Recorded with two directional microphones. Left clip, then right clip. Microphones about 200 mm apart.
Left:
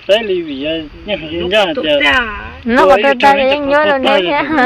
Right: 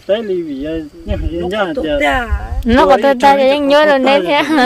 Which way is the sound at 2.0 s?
5° left (ahead or behind).